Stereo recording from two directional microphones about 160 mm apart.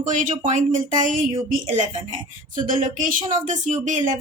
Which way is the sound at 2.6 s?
55° right (ahead or behind).